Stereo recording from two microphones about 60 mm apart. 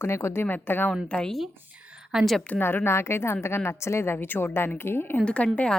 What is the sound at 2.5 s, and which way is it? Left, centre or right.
A woman's voice, left.